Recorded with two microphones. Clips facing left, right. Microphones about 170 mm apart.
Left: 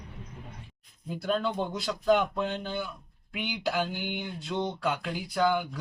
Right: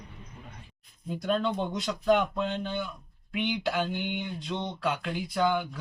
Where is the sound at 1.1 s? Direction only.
Centre (ahead or behind).